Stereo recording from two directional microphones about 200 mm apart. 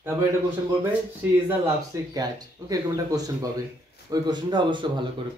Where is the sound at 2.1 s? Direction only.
20° right (ahead or behind).